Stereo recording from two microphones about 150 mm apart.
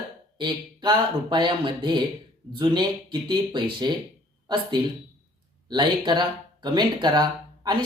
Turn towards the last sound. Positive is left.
turn(degrees=-30)  # may be behind; listen again after turning